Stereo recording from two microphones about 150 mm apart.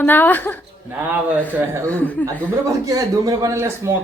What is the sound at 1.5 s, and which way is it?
Speech, 15° right (ahead or behind).